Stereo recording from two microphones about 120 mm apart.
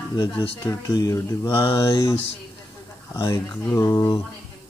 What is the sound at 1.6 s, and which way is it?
Speech, 45° left (ahead or behind).